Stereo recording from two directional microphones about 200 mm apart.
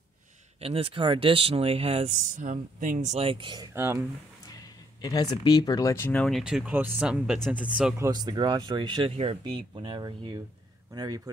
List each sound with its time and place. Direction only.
0.6 s speech: 30° right (ahead or behind); by 4.0 s 15° right (ahead or behind)
4.5 s speech: 20° left (ahead or behind); by 7.9 s 5° right (ahead or behind)
8.0 s speech: 20° right (ahead or behind)